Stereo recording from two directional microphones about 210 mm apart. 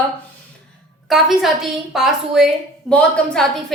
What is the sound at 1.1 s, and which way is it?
A woman's voice, centre (ahead or behind).